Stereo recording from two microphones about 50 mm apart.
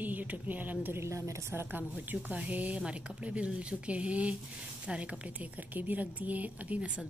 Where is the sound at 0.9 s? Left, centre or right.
Right.